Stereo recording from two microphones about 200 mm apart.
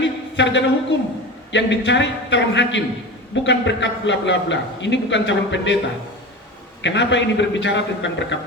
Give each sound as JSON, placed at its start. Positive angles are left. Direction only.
{"t": 0.3, "sound": "a man's voice", "side_deg": 65}
{"t": 6.8, "sound": "a man's voice", "side_deg": 65}